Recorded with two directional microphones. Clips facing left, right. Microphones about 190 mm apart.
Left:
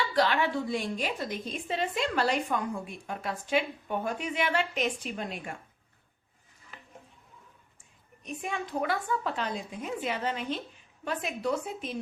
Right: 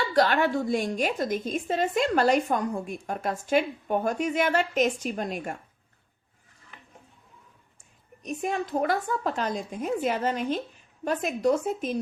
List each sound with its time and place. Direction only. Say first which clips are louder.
0.0 s a woman's voice: right 4 dB; 45° right (ahead or behind)
8.2 s a woman's voice: right 6 dB; 40° right (ahead or behind)